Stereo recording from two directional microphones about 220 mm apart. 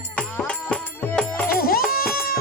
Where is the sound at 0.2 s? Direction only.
5° left (ahead or behind).